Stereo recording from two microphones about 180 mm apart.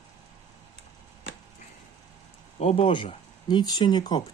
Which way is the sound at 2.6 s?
30° left (ahead or behind).